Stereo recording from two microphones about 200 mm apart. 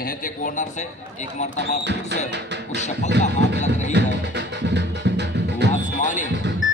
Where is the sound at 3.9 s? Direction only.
60° right (ahead or behind).